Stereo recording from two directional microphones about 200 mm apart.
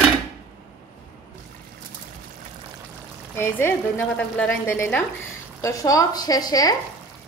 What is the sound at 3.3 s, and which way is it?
Speech, 10° left (ahead or behind).